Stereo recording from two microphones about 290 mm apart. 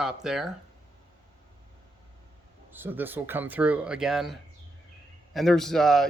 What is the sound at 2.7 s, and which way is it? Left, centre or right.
Speech, centre.